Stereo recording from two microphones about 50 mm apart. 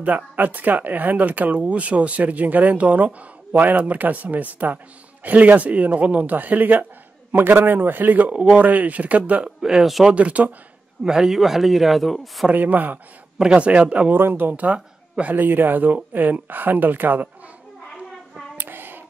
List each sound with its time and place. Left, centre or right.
0.0 s speech: right
9.6 s speech: centre
9.8 s speech: centre
10.1 s a man's voice: right
11.1 s speech: centre
12.5 s speech: right
13.4 s a man's voice: right
14.1 s speech: right
14.5 s speech: right
18.6 s a sound: right